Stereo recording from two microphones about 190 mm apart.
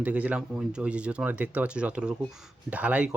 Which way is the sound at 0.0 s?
5° right (ahead or behind).